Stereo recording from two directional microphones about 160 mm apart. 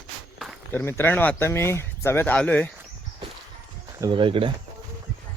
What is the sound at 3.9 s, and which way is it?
Speech, 25° right (ahead or behind).